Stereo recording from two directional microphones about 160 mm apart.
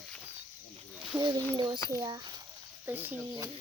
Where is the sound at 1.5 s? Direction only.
30° right (ahead or behind).